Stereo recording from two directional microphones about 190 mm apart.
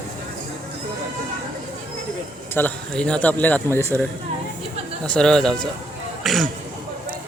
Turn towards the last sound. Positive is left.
turn(degrees=0)  # may be behind; listen again after turning